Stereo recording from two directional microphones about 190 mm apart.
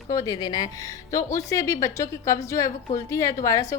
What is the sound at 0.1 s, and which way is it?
A woman's voice, 20° left (ahead or behind).